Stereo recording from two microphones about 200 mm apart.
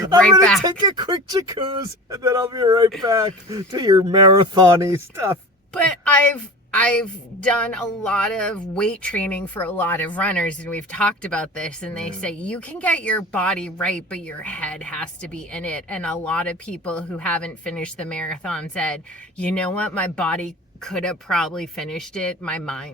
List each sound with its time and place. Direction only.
0.6 s speech: 20° right (ahead or behind)
5.7 s a woman's voice: 5° left (ahead or behind)